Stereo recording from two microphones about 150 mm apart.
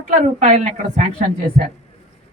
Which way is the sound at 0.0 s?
55° right (ahead or behind).